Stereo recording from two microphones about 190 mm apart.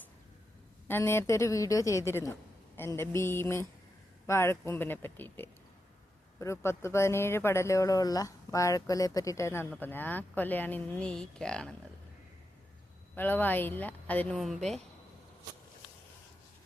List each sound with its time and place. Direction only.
0.9 s speech: 10° left (ahead or behind)
13.1 s speech: 10° left (ahead or behind)